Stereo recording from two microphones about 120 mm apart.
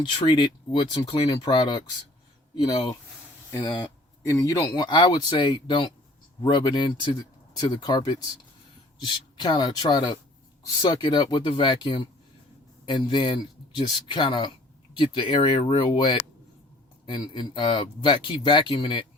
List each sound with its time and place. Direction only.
0.0 s speech: 40° left (ahead or behind)
4.3 s speech: 25° left (ahead or behind); by 19.0 s 50° left (ahead or behind)